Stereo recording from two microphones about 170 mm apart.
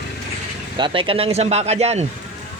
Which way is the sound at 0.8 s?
30° right (ahead or behind).